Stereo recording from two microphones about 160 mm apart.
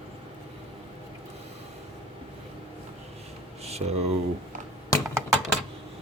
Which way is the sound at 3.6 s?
40° right (ahead or behind).